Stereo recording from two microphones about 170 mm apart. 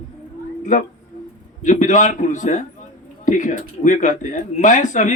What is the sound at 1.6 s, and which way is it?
Speech, 50° left (ahead or behind).